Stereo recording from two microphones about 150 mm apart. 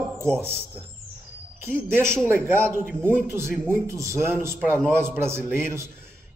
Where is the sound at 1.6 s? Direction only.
15° right (ahead or behind).